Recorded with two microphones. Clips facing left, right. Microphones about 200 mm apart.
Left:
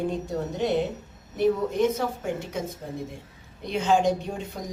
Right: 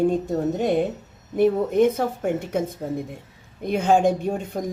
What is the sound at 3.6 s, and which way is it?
Speech, 55° right (ahead or behind).